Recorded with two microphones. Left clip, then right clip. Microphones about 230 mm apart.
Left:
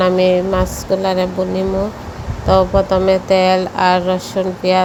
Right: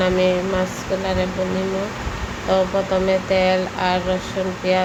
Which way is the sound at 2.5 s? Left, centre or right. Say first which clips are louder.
Left 6 dB; left.